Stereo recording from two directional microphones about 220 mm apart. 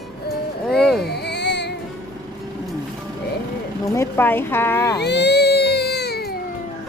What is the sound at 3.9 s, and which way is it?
Speech, 10° left (ahead or behind).